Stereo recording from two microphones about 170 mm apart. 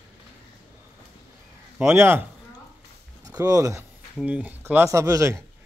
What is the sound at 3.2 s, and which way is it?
Speech, 20° right (ahead or behind).